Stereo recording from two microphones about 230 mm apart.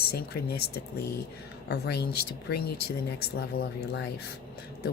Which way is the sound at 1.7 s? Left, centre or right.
Left.